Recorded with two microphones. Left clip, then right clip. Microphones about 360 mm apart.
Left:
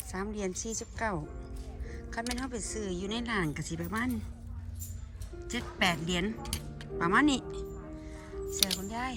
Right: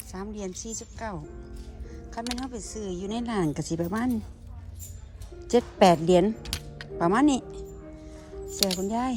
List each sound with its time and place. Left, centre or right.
0.1 s speech: centre
5.5 s speech: centre
6.4 s music: centre
7.0 s speech: centre
8.4 s music: centre
8.9 s speech: centre